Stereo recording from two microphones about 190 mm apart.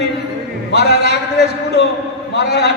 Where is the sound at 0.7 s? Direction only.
60° left (ahead or behind).